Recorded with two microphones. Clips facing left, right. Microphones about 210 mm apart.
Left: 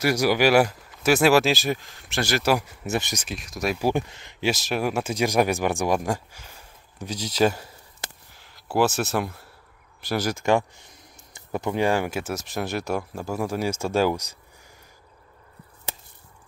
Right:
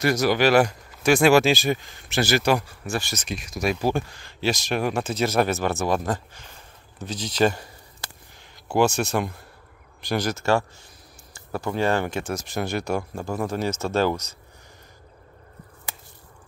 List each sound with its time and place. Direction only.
0.0 s speech: 10° left (ahead or behind)
2.6 s speech: 20° left (ahead or behind)
3.3 s speech: centre (ahead or behind)
3.8 s speech: 20° left (ahead or behind)
4.5 s speech: 5° left (ahead or behind)
8.6 s speech: 5° left (ahead or behind)